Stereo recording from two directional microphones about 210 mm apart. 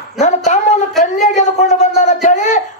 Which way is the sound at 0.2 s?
35° left (ahead or behind).